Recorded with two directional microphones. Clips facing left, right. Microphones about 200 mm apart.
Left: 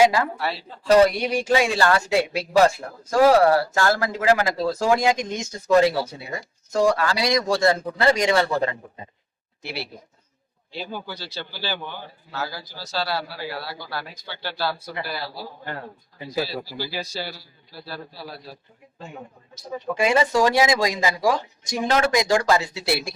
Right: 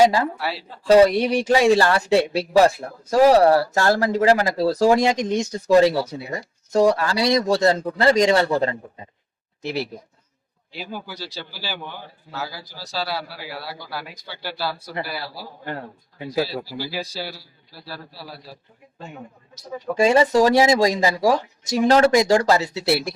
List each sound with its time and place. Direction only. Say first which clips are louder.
0.0 s speech: right 1 dB; 30° right (ahead or behind)
0.3 s a man's voice: even; 5° right (ahead or behind)
1.0 s a man's voice: right 3 dB; 35° right (ahead or behind)
10.7 s a man's voice: left 1 dB; 5° right (ahead or behind)
13.0 s a man's voice: left 1 dB; 10° right (ahead or behind)
20.0 s a man's voice: right 4 dB; 35° right (ahead or behind)